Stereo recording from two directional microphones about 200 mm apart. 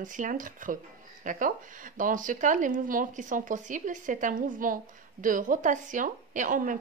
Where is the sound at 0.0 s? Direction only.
40° right (ahead or behind).